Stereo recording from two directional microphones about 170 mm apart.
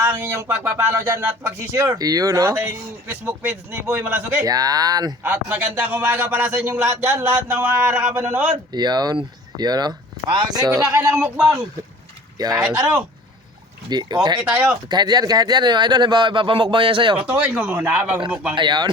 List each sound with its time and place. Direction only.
0.0 s speech: 15° right (ahead or behind)
4.4 s speech: 20° right (ahead or behind)
5.3 s speech: 10° right (ahead or behind)
8.7 s speech: 25° right (ahead or behind)
12.6 s speech: 5° right (ahead or behind)
13.9 s speech: 25° right (ahead or behind)
14.4 s speech: 10° right (ahead or behind)
14.8 s speech: 25° right (ahead or behind)
17.2 s speech: 10° right (ahead or behind)
18.5 s speech: 25° right (ahead or behind)